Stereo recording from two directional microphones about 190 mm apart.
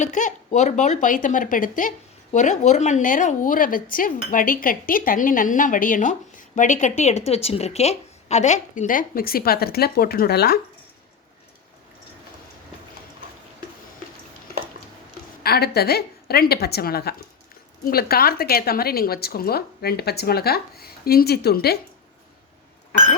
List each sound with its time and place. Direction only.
0.0 s a woman's voice: 40° left (ahead or behind)
15.4 s a woman's voice: 55° left (ahead or behind)